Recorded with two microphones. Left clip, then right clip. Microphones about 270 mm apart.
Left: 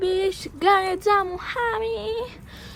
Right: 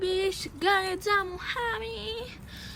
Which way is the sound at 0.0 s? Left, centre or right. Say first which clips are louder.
Left 5 dB; centre.